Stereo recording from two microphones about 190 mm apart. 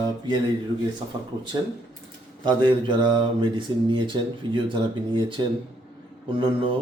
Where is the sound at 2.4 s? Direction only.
25° right (ahead or behind).